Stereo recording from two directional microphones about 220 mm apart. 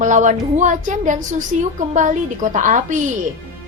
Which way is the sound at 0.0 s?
35° right (ahead or behind).